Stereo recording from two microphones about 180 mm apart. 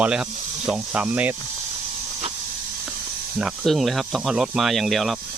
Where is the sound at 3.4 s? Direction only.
Centre (ahead or behind).